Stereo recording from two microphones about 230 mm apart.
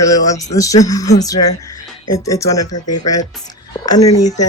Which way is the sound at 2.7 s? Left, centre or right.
Left.